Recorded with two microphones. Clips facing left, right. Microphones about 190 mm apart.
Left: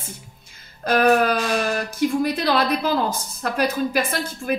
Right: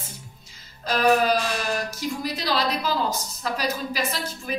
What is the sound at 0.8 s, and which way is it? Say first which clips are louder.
A woman's voice: left 3 dB; 55° left (ahead or behind).